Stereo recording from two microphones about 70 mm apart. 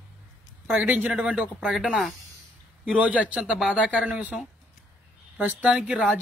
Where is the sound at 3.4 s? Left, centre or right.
Centre.